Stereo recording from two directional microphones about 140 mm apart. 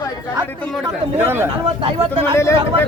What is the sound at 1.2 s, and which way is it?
Speech, 15° right (ahead or behind).